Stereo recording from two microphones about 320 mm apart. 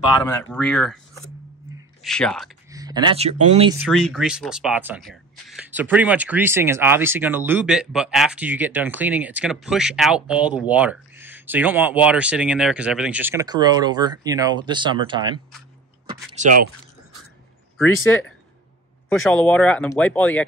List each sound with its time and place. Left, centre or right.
0.2 s speech: centre
2.7 s speech: centre
3.9 s speech: centre; by 16.6 s right
19.0 s speech: centre